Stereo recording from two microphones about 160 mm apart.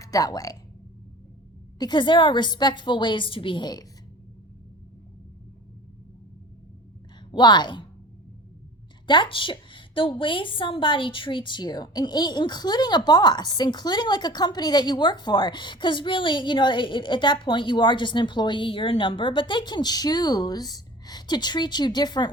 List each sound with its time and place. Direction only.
0.0 s a woman's voice: 20° left (ahead or behind)
1.8 s a woman's voice: 30° left (ahead or behind)
7.3 s a woman's voice: 30° left (ahead or behind)
9.0 s a woman's voice: 30° left (ahead or behind)